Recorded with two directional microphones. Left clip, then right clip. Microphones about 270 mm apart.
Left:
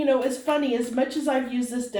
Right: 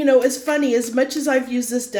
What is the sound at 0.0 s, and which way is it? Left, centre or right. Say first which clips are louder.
A woman's voice: right 7 dB; right.